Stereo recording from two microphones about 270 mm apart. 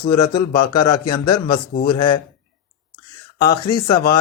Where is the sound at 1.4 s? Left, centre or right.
Left.